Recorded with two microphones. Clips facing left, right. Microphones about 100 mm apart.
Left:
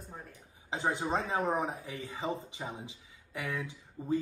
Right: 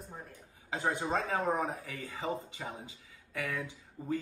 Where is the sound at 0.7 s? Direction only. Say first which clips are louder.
Left 1 dB; 20° left (ahead or behind).